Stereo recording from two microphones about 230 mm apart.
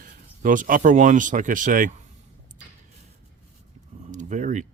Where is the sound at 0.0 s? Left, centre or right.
Right.